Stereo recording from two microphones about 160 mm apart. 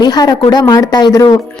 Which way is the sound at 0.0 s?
25° left (ahead or behind).